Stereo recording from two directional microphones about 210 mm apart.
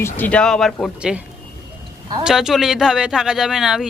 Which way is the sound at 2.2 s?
Centre (ahead or behind).